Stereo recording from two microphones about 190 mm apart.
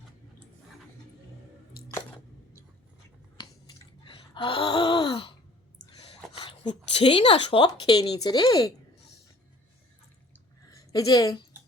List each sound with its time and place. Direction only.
3.3 s gasp: 25° left (ahead or behind)
5.8 s a sound: 30° left (ahead or behind)
6.5 s a woman's voice: 25° left (ahead or behind)
10.8 s a woman's voice: 20° left (ahead or behind)